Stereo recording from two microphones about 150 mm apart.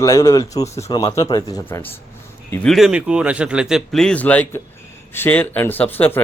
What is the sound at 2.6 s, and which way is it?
Speech, centre (ahead or behind).